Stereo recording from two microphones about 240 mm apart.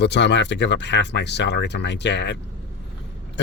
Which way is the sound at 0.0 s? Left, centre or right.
Left.